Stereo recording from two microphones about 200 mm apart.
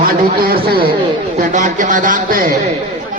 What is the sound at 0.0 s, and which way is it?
A man's voice, 50° right (ahead or behind).